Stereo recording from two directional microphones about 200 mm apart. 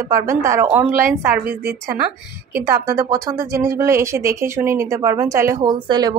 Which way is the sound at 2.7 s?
15° right (ahead or behind).